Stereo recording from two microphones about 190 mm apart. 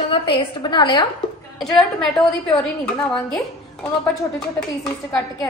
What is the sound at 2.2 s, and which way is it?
A woman's voice, centre (ahead or behind).